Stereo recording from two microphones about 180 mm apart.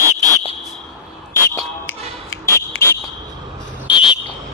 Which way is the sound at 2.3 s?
15° left (ahead or behind).